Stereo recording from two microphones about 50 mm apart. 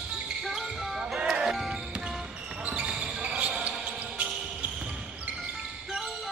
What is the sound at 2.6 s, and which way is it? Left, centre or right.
Basketball bounce, right.